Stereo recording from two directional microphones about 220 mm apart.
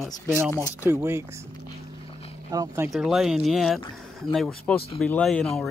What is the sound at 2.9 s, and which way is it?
Speech, centre (ahead or behind).